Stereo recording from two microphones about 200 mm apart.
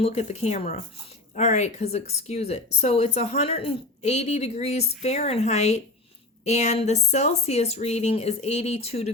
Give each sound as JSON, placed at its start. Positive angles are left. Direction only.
{"t": 0.0, "sound": "speech", "side_deg": 35}